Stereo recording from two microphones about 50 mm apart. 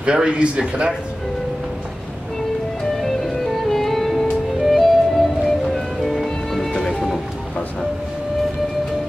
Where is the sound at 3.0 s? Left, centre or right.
Centre.